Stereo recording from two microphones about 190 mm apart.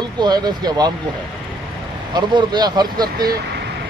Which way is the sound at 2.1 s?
25° right (ahead or behind).